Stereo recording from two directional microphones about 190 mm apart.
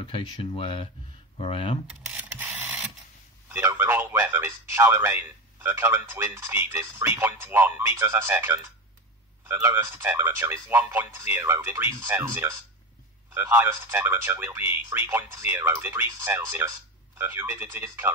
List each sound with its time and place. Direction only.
0.0 s speech: 25° left (ahead or behind)
2.0 s printer: 10° right (ahead or behind)
3.5 s a man's voice: 10° right (ahead or behind)